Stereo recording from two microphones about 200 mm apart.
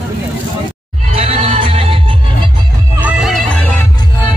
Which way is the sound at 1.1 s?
30° right (ahead or behind).